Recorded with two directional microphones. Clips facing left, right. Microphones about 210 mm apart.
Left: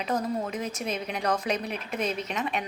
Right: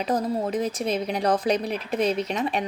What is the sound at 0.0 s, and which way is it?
Speech, 35° right (ahead or behind).